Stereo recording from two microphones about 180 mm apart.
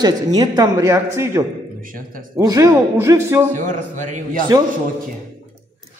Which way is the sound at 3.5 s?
45° right (ahead or behind).